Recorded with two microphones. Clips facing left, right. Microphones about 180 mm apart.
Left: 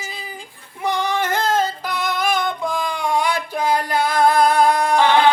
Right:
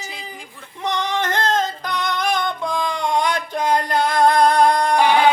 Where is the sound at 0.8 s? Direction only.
10° left (ahead or behind).